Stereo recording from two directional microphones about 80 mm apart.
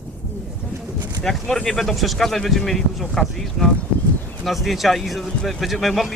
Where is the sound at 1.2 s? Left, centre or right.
Centre.